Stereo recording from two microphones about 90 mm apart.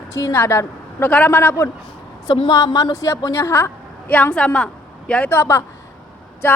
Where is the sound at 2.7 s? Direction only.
40° left (ahead or behind).